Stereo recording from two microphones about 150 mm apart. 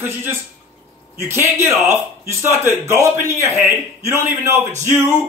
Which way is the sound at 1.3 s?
15° right (ahead or behind).